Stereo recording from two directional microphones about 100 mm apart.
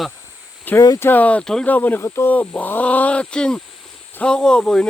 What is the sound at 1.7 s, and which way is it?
Speech, 15° left (ahead or behind).